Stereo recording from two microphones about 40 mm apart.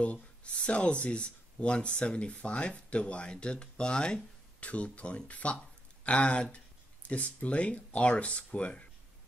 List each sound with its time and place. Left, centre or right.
0.0 s speech: left
4.6 s speech: left